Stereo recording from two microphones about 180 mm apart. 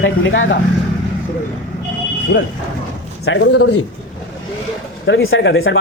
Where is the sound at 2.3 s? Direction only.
75° left (ahead or behind).